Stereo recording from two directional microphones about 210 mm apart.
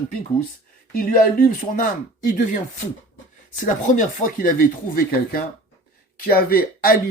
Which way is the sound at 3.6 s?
35° left (ahead or behind).